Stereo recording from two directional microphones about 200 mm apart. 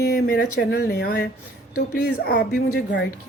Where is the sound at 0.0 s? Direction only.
50° left (ahead or behind).